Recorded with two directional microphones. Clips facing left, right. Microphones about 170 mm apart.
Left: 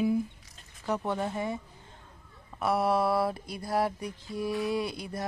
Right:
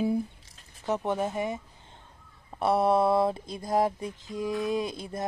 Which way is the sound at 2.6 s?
25° right (ahead or behind).